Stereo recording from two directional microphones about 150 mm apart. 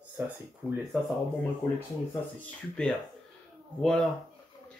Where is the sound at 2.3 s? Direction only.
5° left (ahead or behind).